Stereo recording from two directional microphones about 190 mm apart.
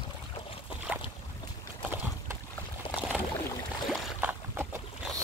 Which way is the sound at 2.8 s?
25° left (ahead or behind).